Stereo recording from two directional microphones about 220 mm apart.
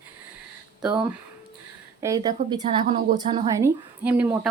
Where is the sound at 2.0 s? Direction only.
15° right (ahead or behind).